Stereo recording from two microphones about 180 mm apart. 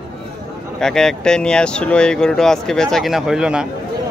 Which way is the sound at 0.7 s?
5° left (ahead or behind).